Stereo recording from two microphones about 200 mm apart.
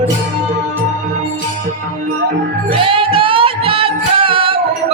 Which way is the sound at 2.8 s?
25° right (ahead or behind).